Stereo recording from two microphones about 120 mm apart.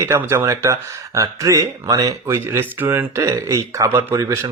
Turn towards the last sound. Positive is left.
turn(degrees=-20)  # may be behind; listen again after turning